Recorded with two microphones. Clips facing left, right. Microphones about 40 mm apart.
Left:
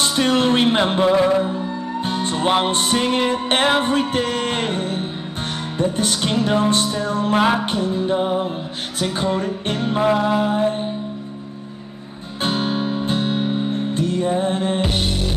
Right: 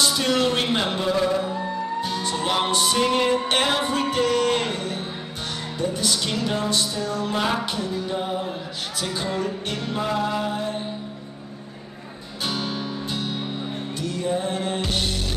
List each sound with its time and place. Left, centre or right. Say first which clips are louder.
0.0 s music: left 3 dB; left
12.4 s music: left 7 dB; left